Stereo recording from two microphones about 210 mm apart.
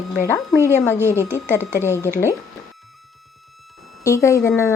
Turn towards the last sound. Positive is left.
turn(degrees=15)  # may be behind; listen again after turning